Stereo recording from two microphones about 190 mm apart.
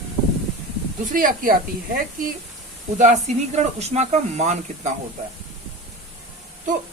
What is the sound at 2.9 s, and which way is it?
Speech, 40° right (ahead or behind).